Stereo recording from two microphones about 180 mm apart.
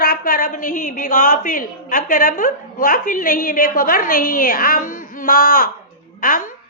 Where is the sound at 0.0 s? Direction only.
55° left (ahead or behind).